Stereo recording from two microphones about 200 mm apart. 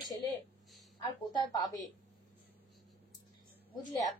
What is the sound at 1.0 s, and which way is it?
Speech, 20° left (ahead or behind).